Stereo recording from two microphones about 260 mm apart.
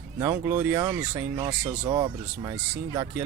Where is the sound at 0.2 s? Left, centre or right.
Centre.